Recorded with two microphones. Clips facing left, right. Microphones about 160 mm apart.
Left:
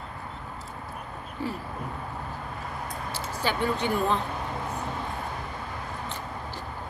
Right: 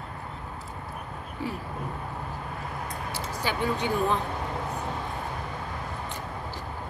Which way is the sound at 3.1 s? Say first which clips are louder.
Left 2 dB; 15° right (ahead or behind).